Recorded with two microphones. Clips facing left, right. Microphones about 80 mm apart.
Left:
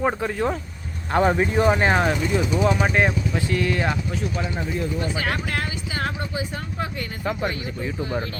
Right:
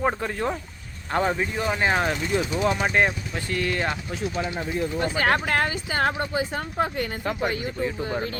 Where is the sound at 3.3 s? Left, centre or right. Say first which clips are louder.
Left 4 dB; centre.